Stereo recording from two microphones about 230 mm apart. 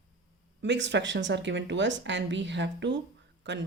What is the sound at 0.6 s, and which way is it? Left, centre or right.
Speech, right.